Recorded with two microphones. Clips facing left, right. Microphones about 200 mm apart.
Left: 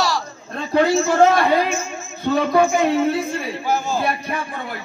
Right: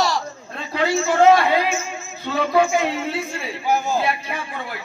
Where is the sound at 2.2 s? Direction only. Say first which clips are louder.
Left 2 dB; 50° left (ahead or behind).